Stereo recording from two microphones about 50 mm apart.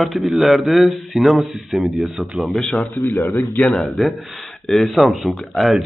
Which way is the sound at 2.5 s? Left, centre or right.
Centre.